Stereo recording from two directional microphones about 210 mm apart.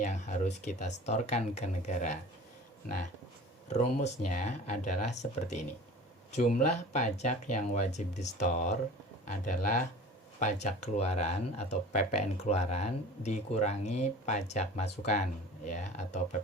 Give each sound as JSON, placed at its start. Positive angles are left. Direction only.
{"t": 0.0, "sound": "speech", "side_deg": 35}
{"t": 3.7, "sound": "speech", "side_deg": 30}
{"t": 6.9, "sound": "speech", "side_deg": 35}